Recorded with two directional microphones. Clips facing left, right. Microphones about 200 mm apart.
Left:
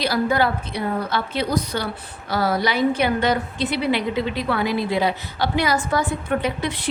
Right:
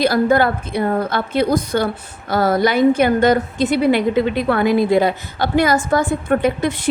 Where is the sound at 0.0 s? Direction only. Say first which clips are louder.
Right 6 dB; 50° right (ahead or behind).